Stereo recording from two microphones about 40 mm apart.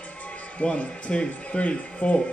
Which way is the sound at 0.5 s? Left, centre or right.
Left.